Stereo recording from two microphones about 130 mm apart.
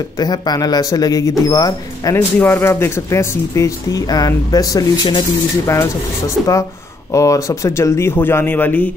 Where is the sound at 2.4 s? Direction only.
15° left (ahead or behind); by 5.7 s 35° left (ahead or behind).